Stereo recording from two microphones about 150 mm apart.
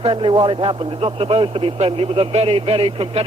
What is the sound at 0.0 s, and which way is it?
Speech, 35° right (ahead or behind).